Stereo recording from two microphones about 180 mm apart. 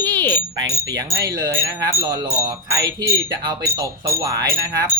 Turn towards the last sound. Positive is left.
turn(degrees=-20)  # may be behind; listen again after turning